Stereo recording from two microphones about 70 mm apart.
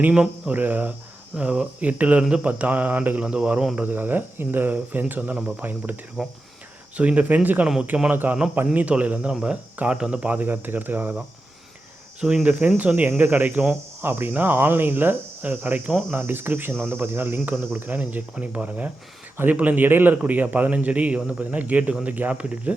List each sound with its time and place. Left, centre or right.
0.0 s speech: centre
3.8 s speech: right
6.2 s speech: centre
6.9 s speech: centre
12.2 s speech: centre